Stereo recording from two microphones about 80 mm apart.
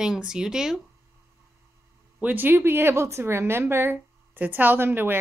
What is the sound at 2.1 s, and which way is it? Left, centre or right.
A woman's voice, right.